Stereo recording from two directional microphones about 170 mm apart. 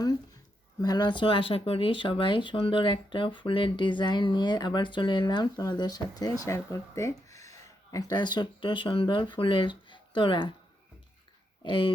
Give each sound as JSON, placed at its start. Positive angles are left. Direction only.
{"t": 0.8, "sound": "speech", "side_deg": 25}
{"t": 11.6, "sound": "speech", "side_deg": 30}